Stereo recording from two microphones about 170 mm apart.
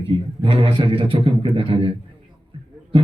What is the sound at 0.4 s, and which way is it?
Speech, 30° right (ahead or behind).